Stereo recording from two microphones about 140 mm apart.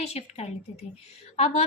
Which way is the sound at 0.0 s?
50° left (ahead or behind).